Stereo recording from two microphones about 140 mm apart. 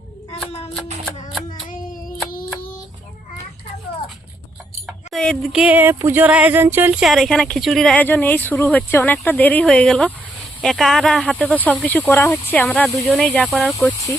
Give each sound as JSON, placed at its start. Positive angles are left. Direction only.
{"t": 5.1, "sound": "a sound", "side_deg": 5}
{"t": 7.0, "sound": "speech", "side_deg": 0}
{"t": 13.7, "sound": "speech", "side_deg": 20}